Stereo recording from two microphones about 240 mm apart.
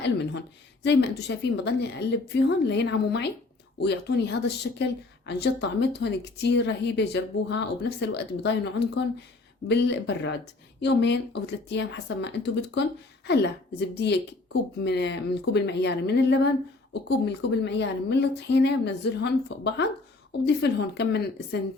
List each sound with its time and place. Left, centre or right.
0.9 s speech: left
9.6 s speech: left